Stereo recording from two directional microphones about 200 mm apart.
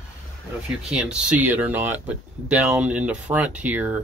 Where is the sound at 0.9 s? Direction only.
5° right (ahead or behind).